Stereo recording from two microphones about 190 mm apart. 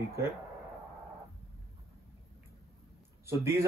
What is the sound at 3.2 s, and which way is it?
Speech, 15° right (ahead or behind).